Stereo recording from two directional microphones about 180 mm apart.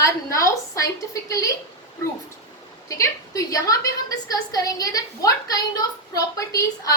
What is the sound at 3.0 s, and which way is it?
A woman's voice, 20° left (ahead or behind).